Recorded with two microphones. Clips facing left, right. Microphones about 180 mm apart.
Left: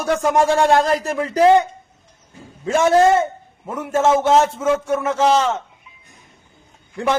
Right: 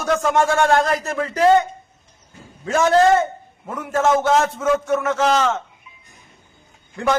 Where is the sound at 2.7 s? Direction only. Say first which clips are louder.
Left 1 dB; 25° left (ahead or behind).